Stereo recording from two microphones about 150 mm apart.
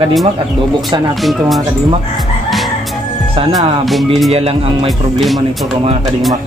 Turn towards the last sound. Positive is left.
turn(degrees=-40)  # may be behind; listen again after turning